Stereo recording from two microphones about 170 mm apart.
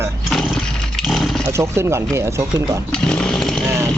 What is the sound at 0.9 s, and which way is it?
Wild animals, centre (ahead or behind).